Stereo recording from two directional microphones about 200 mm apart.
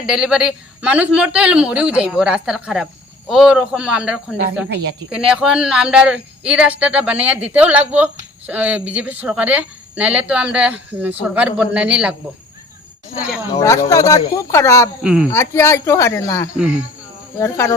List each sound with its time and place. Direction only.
0.0 s speech: 5° right (ahead or behind)
4.7 s speech: 55° right (ahead or behind)
5.1 s speech: 5° right (ahead or behind)
13.6 s a woman's voice: 15° left (ahead or behind)
15.0 s speech: 5° right (ahead or behind)
15.3 s a woman's voice: 15° left (ahead or behind)